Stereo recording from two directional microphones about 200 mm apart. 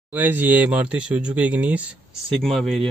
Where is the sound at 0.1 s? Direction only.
10° right (ahead or behind).